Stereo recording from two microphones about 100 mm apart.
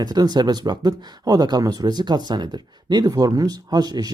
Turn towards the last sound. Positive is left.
turn(degrees=-40)  # may be behind; listen again after turning